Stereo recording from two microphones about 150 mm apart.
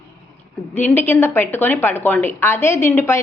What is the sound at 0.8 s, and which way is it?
A woman's voice, 15° left (ahead or behind).